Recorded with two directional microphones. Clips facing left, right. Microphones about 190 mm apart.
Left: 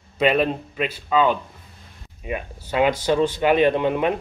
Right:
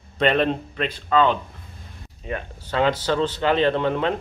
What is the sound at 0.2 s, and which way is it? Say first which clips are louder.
Speech: left 1 dB; 5° left (ahead or behind).